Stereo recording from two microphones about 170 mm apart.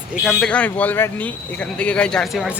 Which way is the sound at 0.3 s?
5° left (ahead or behind).